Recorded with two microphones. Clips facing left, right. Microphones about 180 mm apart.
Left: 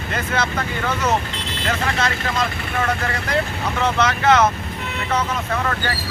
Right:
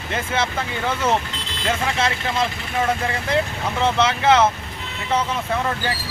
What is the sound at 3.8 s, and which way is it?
Speech, 25° right (ahead or behind).